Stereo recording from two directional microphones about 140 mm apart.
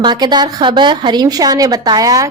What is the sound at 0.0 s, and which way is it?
A woman's voice, 30° right (ahead or behind).